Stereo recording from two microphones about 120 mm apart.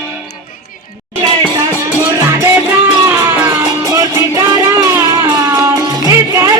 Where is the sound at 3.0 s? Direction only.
20° right (ahead or behind).